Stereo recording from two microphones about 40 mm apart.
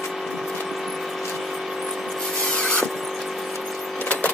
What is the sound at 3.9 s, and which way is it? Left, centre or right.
Vehicle, left.